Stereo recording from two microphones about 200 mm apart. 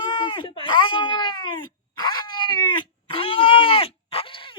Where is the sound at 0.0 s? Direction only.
25° left (ahead or behind).